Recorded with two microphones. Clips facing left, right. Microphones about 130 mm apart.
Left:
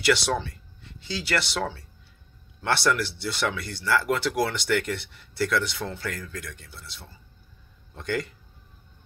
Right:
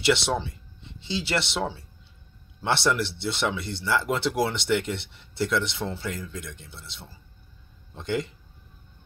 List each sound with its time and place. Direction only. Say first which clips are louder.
0.0 s speech: even; 25° right (ahead or behind)